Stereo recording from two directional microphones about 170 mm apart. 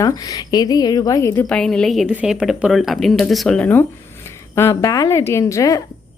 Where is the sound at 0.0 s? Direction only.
20° left (ahead or behind).